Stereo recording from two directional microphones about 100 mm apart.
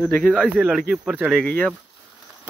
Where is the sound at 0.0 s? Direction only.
15° left (ahead or behind).